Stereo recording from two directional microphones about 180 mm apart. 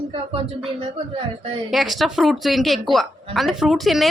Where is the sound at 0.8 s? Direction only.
30° right (ahead or behind).